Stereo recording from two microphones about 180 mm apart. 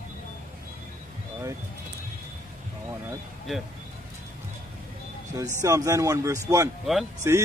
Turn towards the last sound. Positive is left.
turn(degrees=-15)  # may be behind; listen again after turning